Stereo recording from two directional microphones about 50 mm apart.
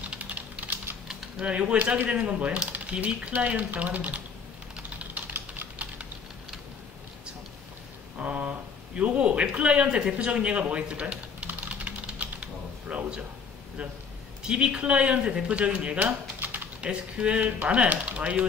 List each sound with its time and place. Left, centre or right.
0.2 s typing: right
1.4 s speech: right
4.9 s typing: right
8.2 s speech: right
10.1 s typing: right
14.4 s speech: centre
16.0 s typing: right
16.8 s speech: right